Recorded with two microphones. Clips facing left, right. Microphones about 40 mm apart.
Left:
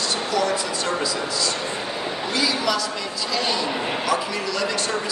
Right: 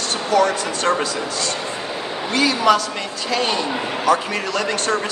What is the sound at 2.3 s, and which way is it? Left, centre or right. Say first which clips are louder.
A man's voice: right 7 dB; right.